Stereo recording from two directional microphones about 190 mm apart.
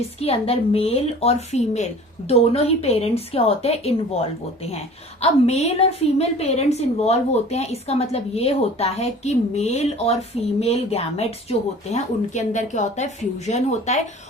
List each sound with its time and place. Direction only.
0.2 s a woman's voice: 30° left (ahead or behind)